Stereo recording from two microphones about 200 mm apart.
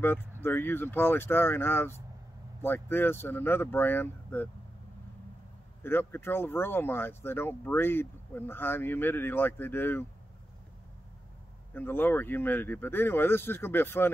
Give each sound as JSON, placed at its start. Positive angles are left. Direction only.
{"t": 0.0, "sound": "speech", "side_deg": 10}
{"t": 5.8, "sound": "speech", "side_deg": 10}
{"t": 11.7, "sound": "speech", "side_deg": 10}